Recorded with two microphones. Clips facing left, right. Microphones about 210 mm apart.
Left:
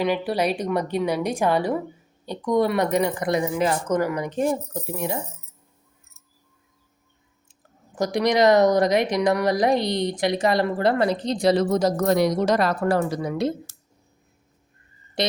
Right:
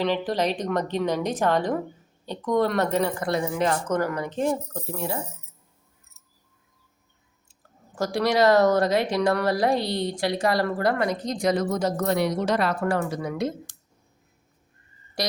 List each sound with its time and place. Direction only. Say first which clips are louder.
0.0 s a woman's voice: left 2 dB; 10° left (ahead or behind)
3.5 s a woman's voice: left 2 dB; 5° left (ahead or behind)
7.9 s speech: left 2 dB; 20° left (ahead or behind)
15.2 s speech: left 4 dB; 25° left (ahead or behind)